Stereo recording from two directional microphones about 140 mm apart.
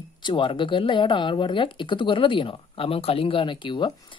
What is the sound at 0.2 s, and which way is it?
Speech, 35° left (ahead or behind).